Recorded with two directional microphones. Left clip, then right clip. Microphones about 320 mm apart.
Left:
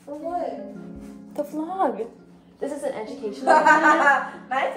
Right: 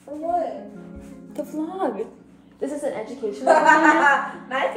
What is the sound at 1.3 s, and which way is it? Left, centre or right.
Speech, centre.